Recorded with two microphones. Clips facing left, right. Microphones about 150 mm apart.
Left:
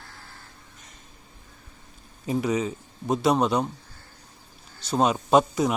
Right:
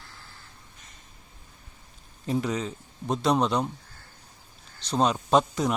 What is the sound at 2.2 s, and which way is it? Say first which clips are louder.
A man's voice: left 3 dB; 5° left (ahead or behind).